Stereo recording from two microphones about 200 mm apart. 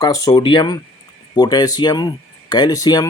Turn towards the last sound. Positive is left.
turn(degrees=20)  # may be behind; listen again after turning